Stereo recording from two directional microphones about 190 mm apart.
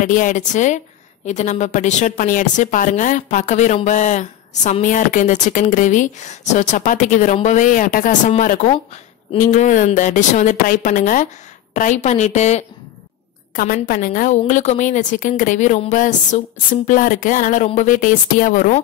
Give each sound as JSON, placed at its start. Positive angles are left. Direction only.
{"t": 0.0, "sound": "a woman's voice", "side_deg": 45}
{"t": 13.8, "sound": "a woman's voice", "side_deg": 45}